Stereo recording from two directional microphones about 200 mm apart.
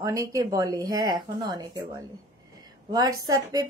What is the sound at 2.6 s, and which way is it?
A woman's voice, 20° right (ahead or behind).